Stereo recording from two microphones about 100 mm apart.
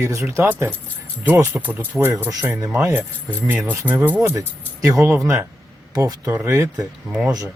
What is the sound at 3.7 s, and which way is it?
Speech, 20° right (ahead or behind).